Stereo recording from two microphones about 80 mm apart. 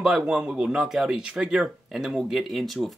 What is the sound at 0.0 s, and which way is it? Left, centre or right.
Speech, centre.